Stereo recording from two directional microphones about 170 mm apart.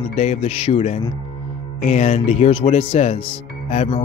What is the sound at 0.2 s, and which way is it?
Speech, 35° left (ahead or behind).